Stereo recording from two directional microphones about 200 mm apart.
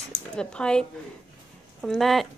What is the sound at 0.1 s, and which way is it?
Speech, 5° left (ahead or behind).